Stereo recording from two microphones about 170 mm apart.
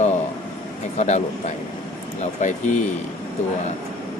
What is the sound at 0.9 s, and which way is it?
Speech, 45° left (ahead or behind).